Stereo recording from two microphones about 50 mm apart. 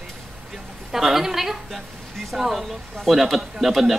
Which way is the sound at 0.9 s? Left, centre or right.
Centre.